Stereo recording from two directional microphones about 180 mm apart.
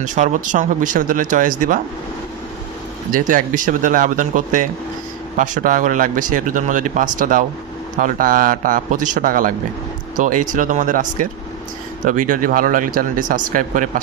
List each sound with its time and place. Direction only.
0.0 s speech: 45° right (ahead or behind)
3.1 s speech: 50° right (ahead or behind)